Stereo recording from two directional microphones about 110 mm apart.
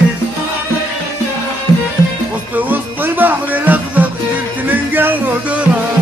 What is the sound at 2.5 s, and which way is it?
Music, 15° right (ahead or behind).